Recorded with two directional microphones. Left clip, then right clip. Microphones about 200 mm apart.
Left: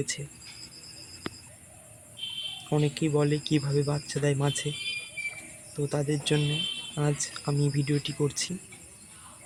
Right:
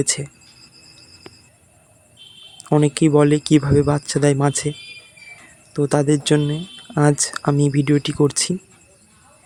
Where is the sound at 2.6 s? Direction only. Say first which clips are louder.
Right 13 dB; 30° right (ahead or behind).